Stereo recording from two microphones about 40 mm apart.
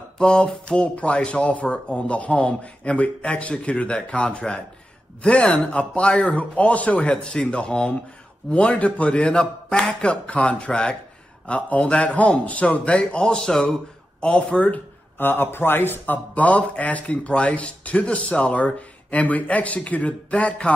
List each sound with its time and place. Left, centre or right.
0.2 s speech: left
5.7 s a man's voice: left
7.1 s speech: left
10.0 s a man's voice: left
15.1 s a man's voice: left
16.3 s a man's voice: left